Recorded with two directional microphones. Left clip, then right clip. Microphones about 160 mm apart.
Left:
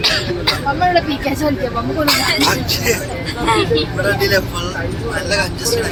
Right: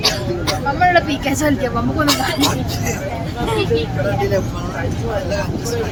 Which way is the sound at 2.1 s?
25° right (ahead or behind).